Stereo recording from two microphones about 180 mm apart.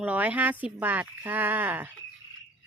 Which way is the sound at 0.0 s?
10° right (ahead or behind).